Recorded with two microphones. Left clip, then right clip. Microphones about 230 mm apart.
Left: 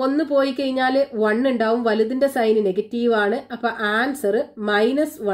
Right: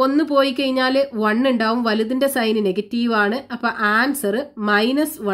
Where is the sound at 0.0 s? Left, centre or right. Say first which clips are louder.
Right 3 dB; right.